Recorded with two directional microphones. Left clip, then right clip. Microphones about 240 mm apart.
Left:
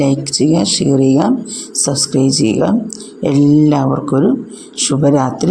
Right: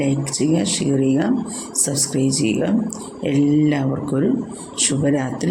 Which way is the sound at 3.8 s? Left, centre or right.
Centre.